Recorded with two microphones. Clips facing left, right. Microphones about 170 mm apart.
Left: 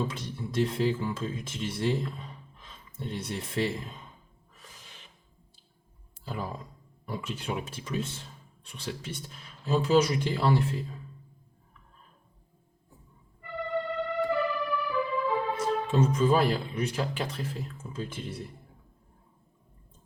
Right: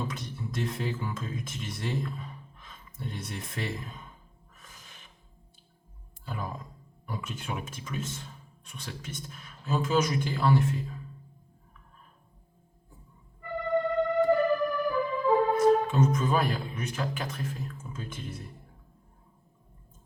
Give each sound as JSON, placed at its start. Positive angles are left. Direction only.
{"t": 0.1, "sound": "speech", "side_deg": 30}
{"t": 6.2, "sound": "speech", "side_deg": 30}
{"t": 13.9, "sound": "music", "side_deg": -45}
{"t": 15.5, "sound": "speech", "side_deg": 30}